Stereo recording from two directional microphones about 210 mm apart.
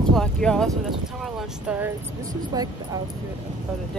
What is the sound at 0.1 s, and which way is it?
A woman's voice, 5° left (ahead or behind).